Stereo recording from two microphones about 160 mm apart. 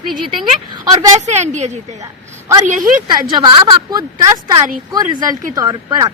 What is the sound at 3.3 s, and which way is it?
A woman's voice, 30° right (ahead or behind).